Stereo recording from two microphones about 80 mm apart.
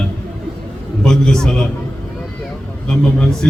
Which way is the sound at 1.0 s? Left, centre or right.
Centre.